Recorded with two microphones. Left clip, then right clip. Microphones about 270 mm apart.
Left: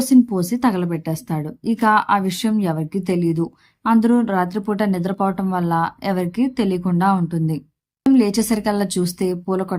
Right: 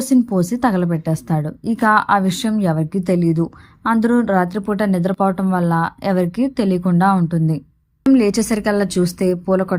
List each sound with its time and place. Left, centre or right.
0.0 s a woman's voice: centre